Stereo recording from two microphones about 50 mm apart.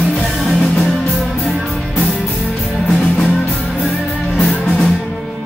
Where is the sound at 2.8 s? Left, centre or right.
Centre.